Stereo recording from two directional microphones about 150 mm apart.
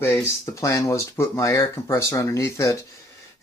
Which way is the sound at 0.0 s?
20° left (ahead or behind).